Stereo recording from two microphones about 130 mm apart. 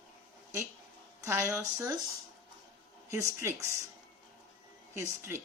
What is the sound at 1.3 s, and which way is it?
Speech, 20° right (ahead or behind).